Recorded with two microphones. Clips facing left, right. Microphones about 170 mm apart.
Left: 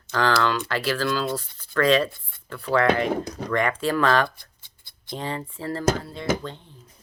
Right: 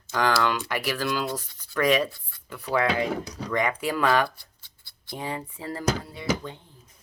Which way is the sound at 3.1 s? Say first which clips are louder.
Left 4 dB; 50° left (ahead or behind).